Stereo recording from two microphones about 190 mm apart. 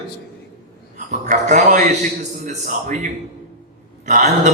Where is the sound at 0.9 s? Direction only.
40° right (ahead or behind).